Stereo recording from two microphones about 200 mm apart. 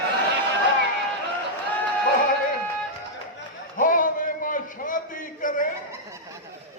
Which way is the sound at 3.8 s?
40° left (ahead or behind).